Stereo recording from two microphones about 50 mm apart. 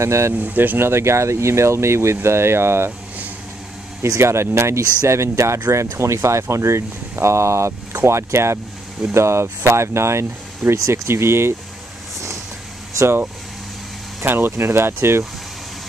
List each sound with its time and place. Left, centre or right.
0.0 s speech: right
0.3 s speech: right
0.7 s speech: right
4.0 s speech: right
14.2 s speech: right